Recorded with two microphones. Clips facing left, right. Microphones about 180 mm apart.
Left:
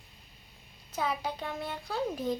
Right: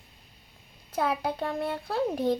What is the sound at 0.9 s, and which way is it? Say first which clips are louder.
Child singing: right 5 dB; 60° right (ahead or behind).